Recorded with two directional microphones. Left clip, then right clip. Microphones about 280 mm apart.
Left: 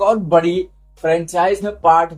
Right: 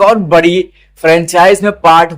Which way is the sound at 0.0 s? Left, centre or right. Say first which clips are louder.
Right 7 dB; right.